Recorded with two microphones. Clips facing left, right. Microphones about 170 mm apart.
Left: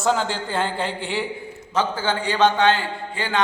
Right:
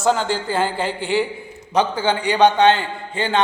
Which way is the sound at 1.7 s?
15° right (ahead or behind).